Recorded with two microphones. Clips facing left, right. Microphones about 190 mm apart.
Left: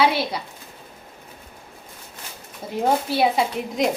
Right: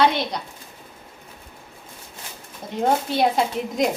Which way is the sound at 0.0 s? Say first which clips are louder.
Even; 5° left (ahead or behind).